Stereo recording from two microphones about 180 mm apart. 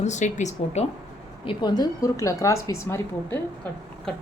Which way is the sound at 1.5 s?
25° left (ahead or behind).